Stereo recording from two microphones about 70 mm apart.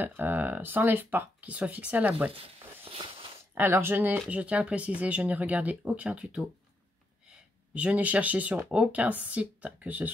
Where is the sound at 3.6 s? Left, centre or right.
Right; by 6.4 s centre.